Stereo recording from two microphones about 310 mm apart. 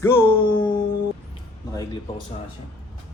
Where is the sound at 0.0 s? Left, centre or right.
Centre.